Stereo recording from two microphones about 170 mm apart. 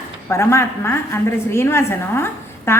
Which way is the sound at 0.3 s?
15° left (ahead or behind).